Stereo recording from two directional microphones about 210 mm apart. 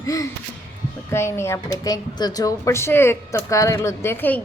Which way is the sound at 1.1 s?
10° left (ahead or behind).